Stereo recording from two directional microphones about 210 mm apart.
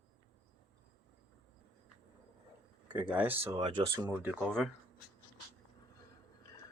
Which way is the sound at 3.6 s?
20° right (ahead or behind).